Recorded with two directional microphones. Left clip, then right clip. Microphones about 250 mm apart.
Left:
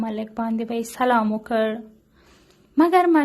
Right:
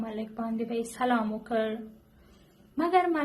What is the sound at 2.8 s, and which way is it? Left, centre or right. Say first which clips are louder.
Speech: left 9 dB; left.